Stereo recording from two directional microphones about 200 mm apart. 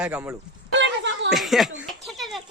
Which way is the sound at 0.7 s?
65° right (ahead or behind).